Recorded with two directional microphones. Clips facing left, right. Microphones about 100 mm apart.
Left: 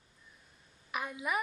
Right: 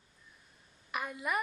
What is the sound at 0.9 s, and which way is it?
Speech, centre (ahead or behind).